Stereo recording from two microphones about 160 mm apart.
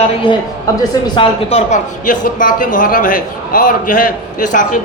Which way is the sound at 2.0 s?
55° left (ahead or behind).